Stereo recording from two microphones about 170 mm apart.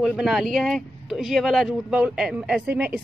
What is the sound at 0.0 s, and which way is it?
A woman's voice, centre (ahead or behind).